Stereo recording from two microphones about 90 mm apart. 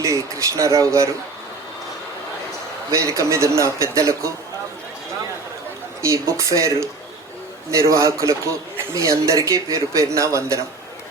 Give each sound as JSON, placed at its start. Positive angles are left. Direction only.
{"t": 0.3, "sound": "speech", "side_deg": -35}
{"t": 2.9, "sound": "speech", "side_deg": -35}
{"t": 6.0, "sound": "speech", "side_deg": -30}